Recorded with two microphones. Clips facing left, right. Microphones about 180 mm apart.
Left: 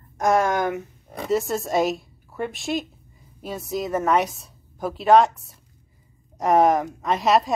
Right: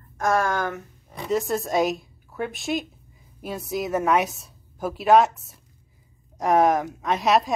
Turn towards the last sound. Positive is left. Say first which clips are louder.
# left 1 dB
turn(degrees=0)  # may be behind; listen again after turning